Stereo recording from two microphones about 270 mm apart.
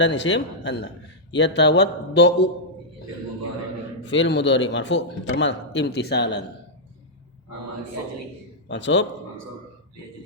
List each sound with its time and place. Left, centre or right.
0.0 s a man's voice: left
4.0 s a man's voice: left
8.6 s a man's voice: left